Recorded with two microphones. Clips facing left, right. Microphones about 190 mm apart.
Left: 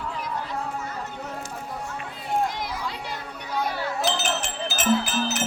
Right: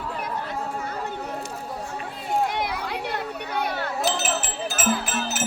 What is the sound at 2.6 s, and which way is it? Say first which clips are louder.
Children playing: right 4 dB; 60° right (ahead or behind).